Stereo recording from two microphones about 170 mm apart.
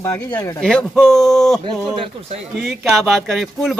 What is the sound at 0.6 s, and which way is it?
Speech, 5° left (ahead or behind).